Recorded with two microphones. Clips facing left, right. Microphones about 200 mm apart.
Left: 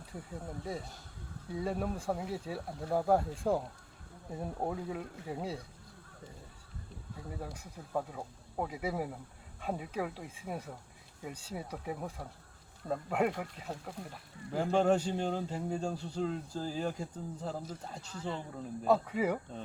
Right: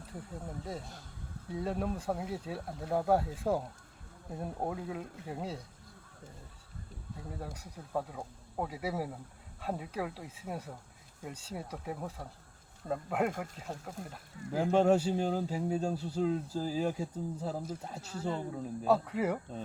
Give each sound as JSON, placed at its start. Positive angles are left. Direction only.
{"t": 0.3, "sound": "speech", "side_deg": 0}
{"t": 7.3, "sound": "speech", "side_deg": 0}
{"t": 18.1, "sound": "speech", "side_deg": -40}
{"t": 18.5, "sound": "speech", "side_deg": -5}